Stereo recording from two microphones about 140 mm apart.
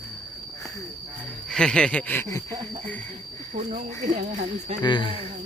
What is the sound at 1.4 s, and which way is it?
Cricket, 5° left (ahead or behind).